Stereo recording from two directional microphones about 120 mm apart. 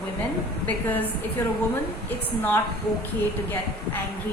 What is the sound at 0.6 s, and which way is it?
Speech, 15° left (ahead or behind).